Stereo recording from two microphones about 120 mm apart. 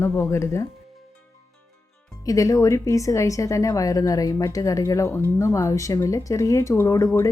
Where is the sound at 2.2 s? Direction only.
25° left (ahead or behind).